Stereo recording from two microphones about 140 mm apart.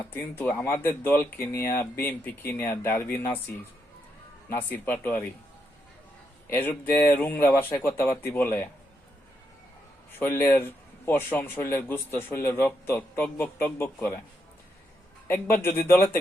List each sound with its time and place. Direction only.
0.0 s a man's voice: 15° left (ahead or behind)
4.4 s a man's voice: 15° left (ahead or behind)
6.5 s a man's voice: 15° left (ahead or behind)
10.2 s a man's voice: 15° left (ahead or behind)
15.3 s a man's voice: 15° left (ahead or behind)